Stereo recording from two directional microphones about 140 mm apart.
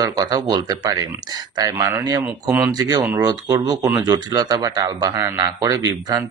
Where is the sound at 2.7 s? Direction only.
25° right (ahead or behind).